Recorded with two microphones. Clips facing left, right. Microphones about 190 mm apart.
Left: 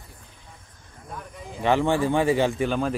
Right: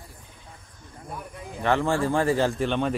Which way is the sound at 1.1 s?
5° right (ahead or behind).